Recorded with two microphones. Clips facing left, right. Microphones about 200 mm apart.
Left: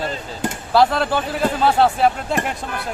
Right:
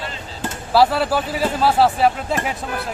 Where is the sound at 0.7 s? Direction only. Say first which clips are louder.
Right 1 dB; 5° right (ahead or behind).